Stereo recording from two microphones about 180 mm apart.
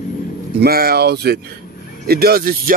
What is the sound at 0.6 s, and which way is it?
Speech, 60° right (ahead or behind).